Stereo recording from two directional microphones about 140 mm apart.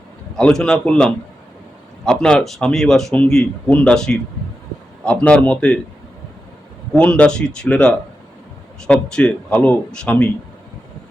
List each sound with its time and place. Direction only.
0.3 s a man's voice: 5° left (ahead or behind)
6.9 s a man's voice: 10° left (ahead or behind)